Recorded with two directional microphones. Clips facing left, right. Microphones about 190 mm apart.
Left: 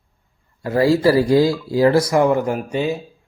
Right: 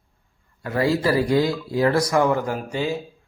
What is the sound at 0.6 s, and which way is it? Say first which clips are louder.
A man's voice: left 5 dB; 30° left (ahead or behind).